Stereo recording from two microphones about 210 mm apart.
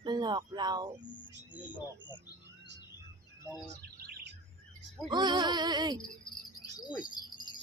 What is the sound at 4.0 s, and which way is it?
Bird, 45° right (ahead or behind).